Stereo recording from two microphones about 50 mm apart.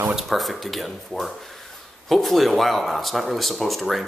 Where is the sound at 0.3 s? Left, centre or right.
Centre.